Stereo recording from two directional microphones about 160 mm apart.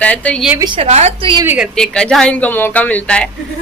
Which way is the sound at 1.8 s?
5° left (ahead or behind).